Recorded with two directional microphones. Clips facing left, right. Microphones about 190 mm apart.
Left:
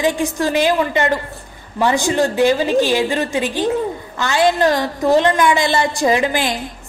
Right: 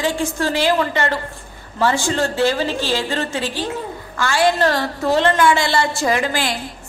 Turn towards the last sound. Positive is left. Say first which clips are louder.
# left 3 dB
turn(degrees=20)  # may be behind; listen again after turning